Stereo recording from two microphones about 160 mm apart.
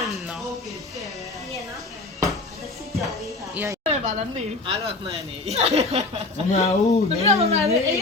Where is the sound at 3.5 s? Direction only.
15° right (ahead or behind).